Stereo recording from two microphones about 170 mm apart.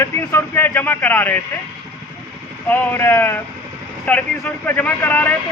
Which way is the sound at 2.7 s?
10° left (ahead or behind).